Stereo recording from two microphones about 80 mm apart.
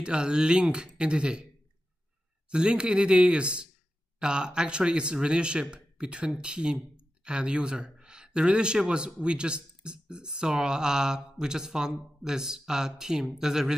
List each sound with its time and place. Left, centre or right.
0.0 s speech: centre
2.5 s speech: centre